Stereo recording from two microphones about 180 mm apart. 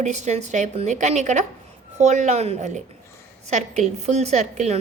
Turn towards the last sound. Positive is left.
turn(degrees=-40)  # may be behind; listen again after turning